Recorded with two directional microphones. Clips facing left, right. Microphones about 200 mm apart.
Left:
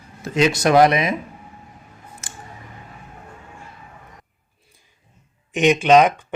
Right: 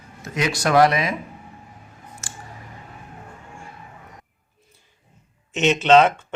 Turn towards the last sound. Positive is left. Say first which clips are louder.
# left 1 dB
turn(degrees=15)  # may be behind; listen again after turning